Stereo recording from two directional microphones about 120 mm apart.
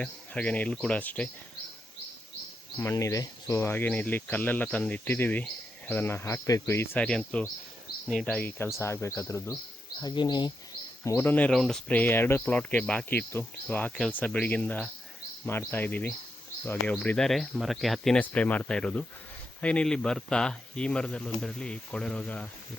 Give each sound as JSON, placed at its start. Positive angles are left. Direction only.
{"t": 0.0, "sound": "speech", "side_deg": 10}
{"t": 2.7, "sound": "speech", "side_deg": 20}
{"t": 8.4, "sound": "speech", "side_deg": 20}
{"t": 10.0, "sound": "speech", "side_deg": 40}
{"t": 11.0, "sound": "speech", "side_deg": 15}